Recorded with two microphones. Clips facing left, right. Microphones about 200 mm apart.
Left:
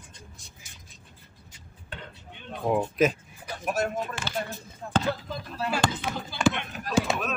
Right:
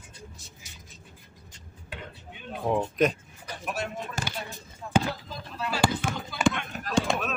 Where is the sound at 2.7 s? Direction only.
5° left (ahead or behind).